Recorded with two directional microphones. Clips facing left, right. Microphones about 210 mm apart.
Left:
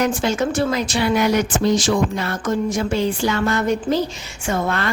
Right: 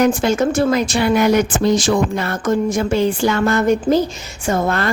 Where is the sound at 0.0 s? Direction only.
50° right (ahead or behind).